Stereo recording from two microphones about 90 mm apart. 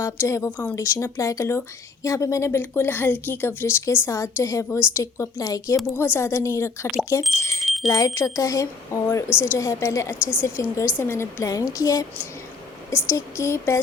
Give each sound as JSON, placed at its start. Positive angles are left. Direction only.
{"t": 0.0, "sound": "a woman's voice", "side_deg": 30}
{"t": 5.9, "sound": "a woman's voice", "side_deg": 30}
{"t": 7.6, "sound": "bicycle bell", "side_deg": 0}
{"t": 7.9, "sound": "speech", "side_deg": 40}
{"t": 12.9, "sound": "speech", "side_deg": 30}